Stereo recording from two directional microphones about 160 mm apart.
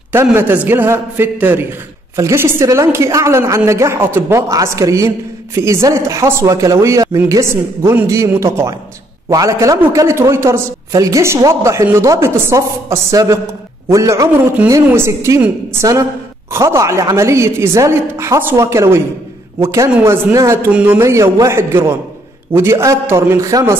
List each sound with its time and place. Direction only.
0.1 s a woman's voice: 15° right (ahead or behind)